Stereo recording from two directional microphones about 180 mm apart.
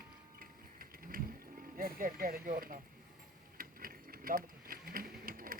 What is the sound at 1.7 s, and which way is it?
Speech, 55° right (ahead or behind).